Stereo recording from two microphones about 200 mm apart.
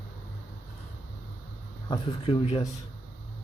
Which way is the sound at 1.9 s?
25° left (ahead or behind).